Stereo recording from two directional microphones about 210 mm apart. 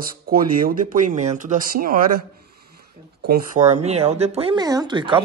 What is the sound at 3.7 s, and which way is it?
Speech, 30° right (ahead or behind).